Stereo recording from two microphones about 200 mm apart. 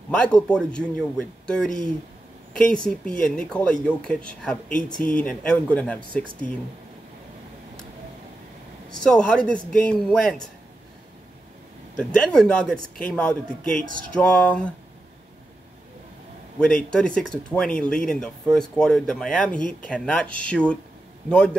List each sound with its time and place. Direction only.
0.1 s speech: 5° left (ahead or behind)
9.0 s speech: 5° left (ahead or behind)
12.0 s speech: 5° left (ahead or behind)
13.8 s speech: 45° right (ahead or behind)
14.1 s speech: 5° left (ahead or behind)
16.5 s speech: 5° left (ahead or behind)